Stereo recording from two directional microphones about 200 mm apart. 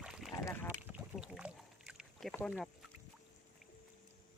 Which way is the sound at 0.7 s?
5° right (ahead or behind).